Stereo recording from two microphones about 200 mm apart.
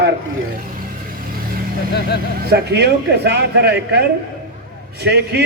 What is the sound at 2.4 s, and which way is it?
Speech, 55° right (ahead or behind).